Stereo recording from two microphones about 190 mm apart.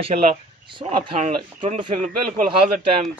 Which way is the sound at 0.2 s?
30° right (ahead or behind).